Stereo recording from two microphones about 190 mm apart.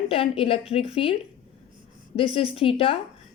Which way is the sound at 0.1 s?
30° left (ahead or behind).